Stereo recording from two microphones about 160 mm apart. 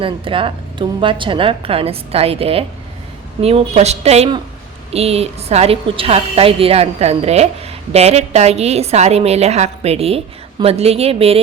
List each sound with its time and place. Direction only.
0.0 s a woman's voice: 35° right (ahead or behind)